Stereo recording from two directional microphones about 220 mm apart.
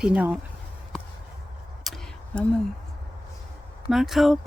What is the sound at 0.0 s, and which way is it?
Speech, 5° right (ahead or behind).